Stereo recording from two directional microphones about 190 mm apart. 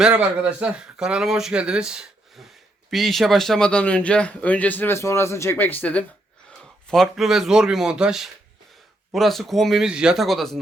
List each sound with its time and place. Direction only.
0.0 s speech: 5° right (ahead or behind)